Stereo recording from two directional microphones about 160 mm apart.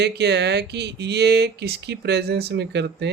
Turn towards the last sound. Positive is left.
turn(degrees=-90)